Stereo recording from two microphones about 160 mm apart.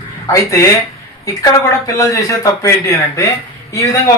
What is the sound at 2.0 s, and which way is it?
Speech, 20° left (ahead or behind).